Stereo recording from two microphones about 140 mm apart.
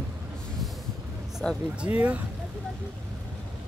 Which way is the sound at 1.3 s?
5° right (ahead or behind).